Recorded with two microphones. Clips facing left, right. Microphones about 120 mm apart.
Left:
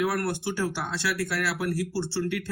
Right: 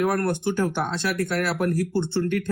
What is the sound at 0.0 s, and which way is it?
Speech, 45° right (ahead or behind).